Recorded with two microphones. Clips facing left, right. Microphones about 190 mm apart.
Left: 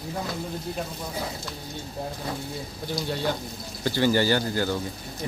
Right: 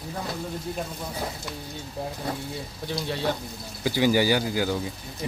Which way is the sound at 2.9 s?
Centre (ahead or behind).